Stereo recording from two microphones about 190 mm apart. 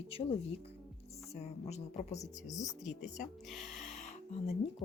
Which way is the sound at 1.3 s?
35° left (ahead or behind).